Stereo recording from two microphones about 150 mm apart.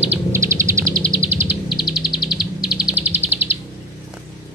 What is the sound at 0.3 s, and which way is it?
Bird, 20° right (ahead or behind).